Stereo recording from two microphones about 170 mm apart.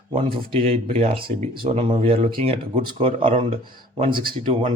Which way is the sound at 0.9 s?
35° right (ahead or behind).